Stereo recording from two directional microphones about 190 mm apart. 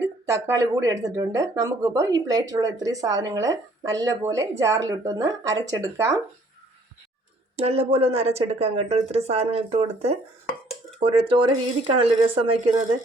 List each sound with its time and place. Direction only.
0.3 s speech: 15° right (ahead or behind)
7.5 s speech: 30° right (ahead or behind)